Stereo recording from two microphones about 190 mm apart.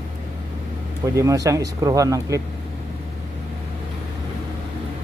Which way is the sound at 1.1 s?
15° right (ahead or behind).